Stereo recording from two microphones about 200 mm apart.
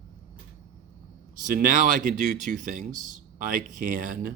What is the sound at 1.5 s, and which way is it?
Speech, 45° right (ahead or behind).